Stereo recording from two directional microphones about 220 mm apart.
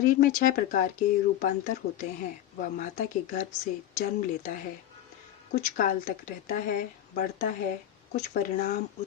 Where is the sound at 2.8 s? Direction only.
35° left (ahead or behind).